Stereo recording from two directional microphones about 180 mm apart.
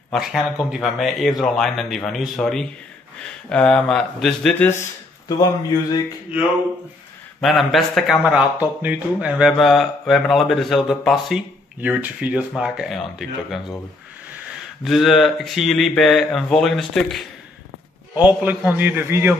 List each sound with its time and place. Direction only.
0.1 s speech: centre (ahead or behind)
5.4 s speech: 20° left (ahead or behind)
7.4 s speech: centre (ahead or behind)
14.9 s speech: centre (ahead or behind)
18.1 s a man's voice: 10° right (ahead or behind)